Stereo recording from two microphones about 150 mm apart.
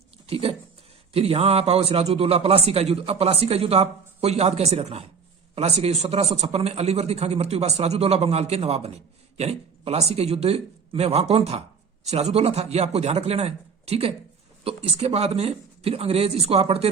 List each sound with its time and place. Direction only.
0.3 s a man's voice: 40° right (ahead or behind)